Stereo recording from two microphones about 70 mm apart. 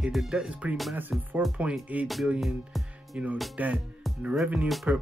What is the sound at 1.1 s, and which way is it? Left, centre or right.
Speech, centre.